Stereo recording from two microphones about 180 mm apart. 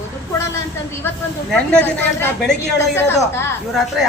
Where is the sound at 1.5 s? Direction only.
10° left (ahead or behind).